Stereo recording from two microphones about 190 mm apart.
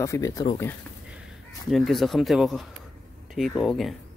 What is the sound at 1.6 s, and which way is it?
Speech, centre (ahead or behind).